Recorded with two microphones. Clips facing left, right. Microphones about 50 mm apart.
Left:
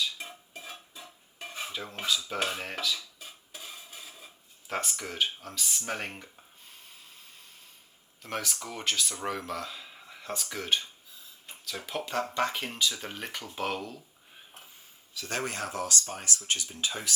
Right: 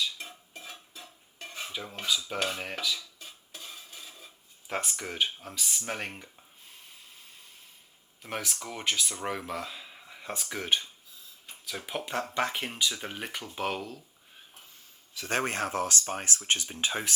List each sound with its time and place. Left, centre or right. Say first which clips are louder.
0.2 s stir: left 1 dB; centre
2.4 s dishes: even; centre
4.7 s speech: even; centre
8.2 s speech: left 1 dB; centre
11.9 s speech: left 1 dB; centre
15.1 s speech: right 4 dB; right